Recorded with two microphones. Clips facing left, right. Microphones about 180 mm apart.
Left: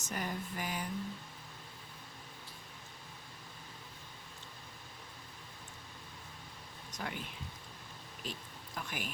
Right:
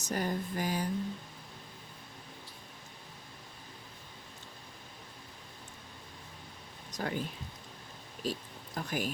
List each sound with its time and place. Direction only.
0.0 s speech: 35° right (ahead or behind)
6.9 s speech: 40° right (ahead or behind)
8.2 s speech: 40° right (ahead or behind)